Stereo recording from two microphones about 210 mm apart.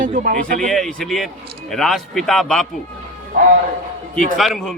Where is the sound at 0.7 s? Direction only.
Centre (ahead or behind).